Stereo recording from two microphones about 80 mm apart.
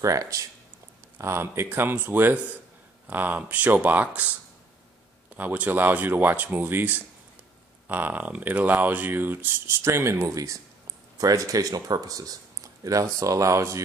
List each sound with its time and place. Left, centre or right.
0.0 s speech: right